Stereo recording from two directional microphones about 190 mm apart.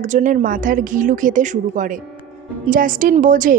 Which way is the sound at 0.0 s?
40° right (ahead or behind).